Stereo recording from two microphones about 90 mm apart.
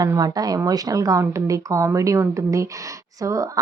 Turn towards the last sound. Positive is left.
turn(degrees=-40)  # may be behind; listen again after turning